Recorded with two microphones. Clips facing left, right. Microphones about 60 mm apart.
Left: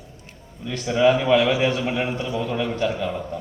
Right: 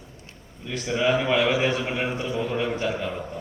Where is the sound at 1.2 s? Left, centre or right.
Centre.